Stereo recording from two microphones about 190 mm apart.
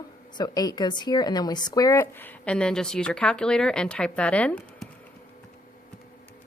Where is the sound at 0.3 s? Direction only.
20° left (ahead or behind).